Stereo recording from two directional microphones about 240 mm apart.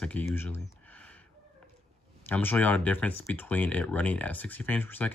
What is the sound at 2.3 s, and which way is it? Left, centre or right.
Speech, centre.